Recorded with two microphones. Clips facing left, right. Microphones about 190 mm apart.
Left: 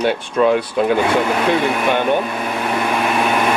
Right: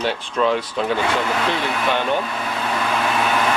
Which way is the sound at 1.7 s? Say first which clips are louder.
Left 4 dB; 15° left (ahead or behind).